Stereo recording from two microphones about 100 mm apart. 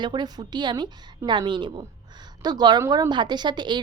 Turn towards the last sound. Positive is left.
turn(degrees=-50)  # may be behind; listen again after turning